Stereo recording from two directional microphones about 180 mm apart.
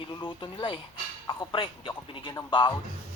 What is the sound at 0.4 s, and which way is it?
Speech, 30° left (ahead or behind).